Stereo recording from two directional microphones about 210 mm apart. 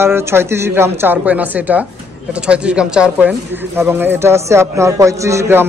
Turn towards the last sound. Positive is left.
turn(degrees=-10)  # may be behind; listen again after turning